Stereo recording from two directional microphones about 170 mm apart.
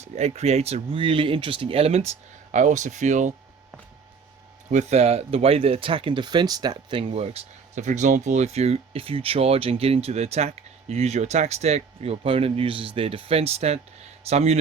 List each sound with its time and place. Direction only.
0.0 s speech: 40° right (ahead or behind)
4.7 s speech: 40° right (ahead or behind)